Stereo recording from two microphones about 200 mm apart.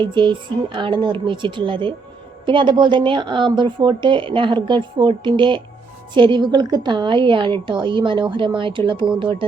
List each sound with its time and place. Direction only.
0.0 s speech: 25° right (ahead or behind)